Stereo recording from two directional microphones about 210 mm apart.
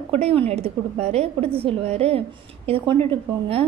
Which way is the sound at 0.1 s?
30° right (ahead or behind).